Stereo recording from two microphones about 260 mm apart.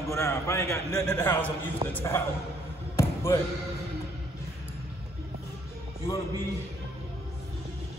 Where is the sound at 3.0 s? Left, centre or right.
Centre.